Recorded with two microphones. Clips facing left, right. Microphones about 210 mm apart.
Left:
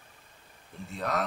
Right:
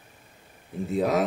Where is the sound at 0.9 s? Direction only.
Centre (ahead or behind).